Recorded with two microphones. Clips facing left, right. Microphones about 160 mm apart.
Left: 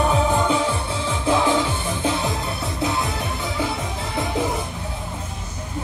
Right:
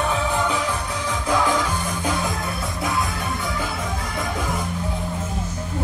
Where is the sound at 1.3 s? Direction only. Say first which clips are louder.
Left 2 dB; 25° left (ahead or behind).